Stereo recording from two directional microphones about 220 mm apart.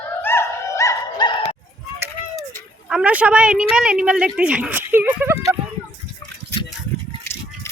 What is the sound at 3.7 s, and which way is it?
Speech, 5° right (ahead or behind).